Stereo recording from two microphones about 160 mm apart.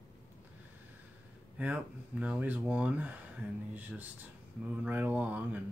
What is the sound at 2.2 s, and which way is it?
Speech, 10° right (ahead or behind).